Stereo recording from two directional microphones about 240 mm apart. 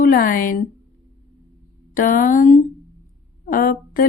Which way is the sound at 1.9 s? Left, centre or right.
Left.